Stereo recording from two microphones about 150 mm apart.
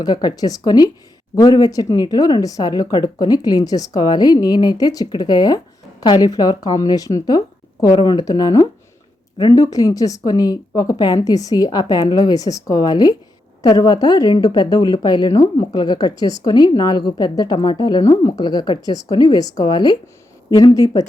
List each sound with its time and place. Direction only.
0.0 s a woman's voice: 25° left (ahead or behind)